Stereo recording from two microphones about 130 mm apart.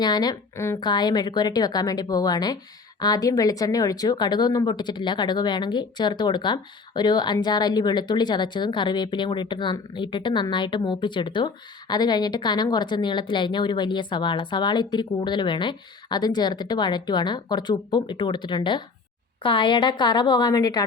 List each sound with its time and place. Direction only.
0.0 s a woman's voice: 30° left (ahead or behind)
0.8 s a woman's voice: 35° left (ahead or behind)